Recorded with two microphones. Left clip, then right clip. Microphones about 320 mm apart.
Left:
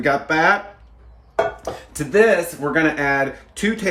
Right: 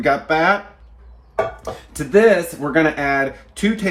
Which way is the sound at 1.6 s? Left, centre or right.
Centre.